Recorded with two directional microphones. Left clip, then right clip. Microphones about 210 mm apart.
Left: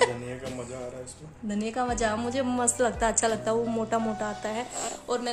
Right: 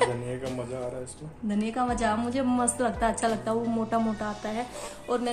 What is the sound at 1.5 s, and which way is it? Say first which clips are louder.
A woman's voice: right 1 dB; 25° left (ahead or behind).